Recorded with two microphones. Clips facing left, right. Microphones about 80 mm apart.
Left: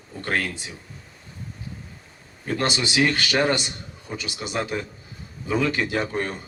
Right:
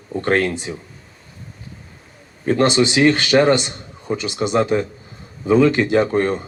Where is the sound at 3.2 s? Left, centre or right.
Right.